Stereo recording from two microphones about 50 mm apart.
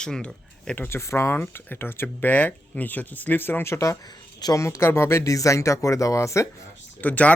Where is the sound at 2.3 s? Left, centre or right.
Left.